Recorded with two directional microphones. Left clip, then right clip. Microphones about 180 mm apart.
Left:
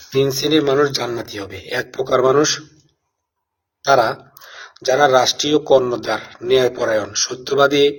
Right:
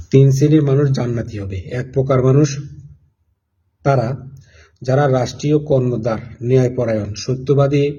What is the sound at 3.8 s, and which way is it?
A man's voice, 15° right (ahead or behind).